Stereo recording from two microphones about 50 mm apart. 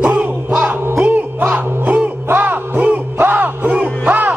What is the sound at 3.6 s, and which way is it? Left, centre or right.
Music, right.